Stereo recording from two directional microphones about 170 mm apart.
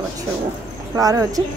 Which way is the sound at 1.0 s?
20° right (ahead or behind).